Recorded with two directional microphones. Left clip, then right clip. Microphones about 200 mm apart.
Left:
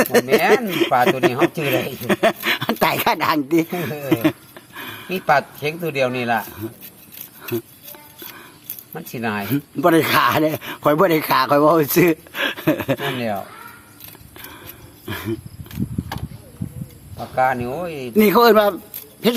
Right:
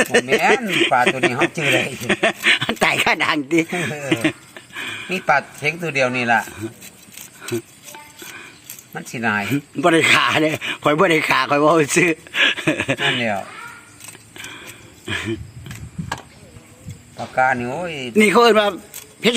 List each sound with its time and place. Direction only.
0.0 s speech: centre (ahead or behind)
8.9 s speech: centre (ahead or behind)
14.3 s a sound: centre (ahead or behind)
15.0 s speech: centre (ahead or behind)
17.3 s speech: centre (ahead or behind)